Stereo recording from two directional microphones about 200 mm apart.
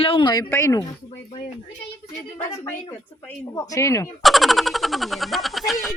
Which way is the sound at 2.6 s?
10° left (ahead or behind).